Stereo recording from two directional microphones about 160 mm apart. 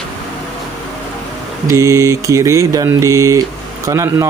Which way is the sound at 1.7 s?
20° right (ahead or behind).